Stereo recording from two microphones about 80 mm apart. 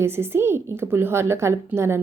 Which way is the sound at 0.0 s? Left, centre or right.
Right.